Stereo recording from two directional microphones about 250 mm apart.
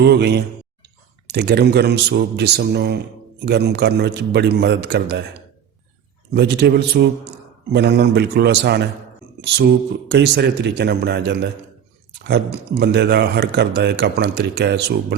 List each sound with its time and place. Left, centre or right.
0.0 s speech: right
6.3 s a man's voice: right